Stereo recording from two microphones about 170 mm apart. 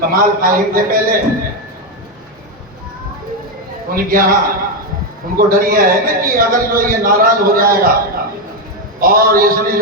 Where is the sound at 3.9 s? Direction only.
60° right (ahead or behind).